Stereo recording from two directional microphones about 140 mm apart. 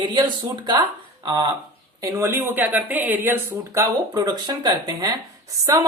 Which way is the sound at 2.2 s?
15° right (ahead or behind).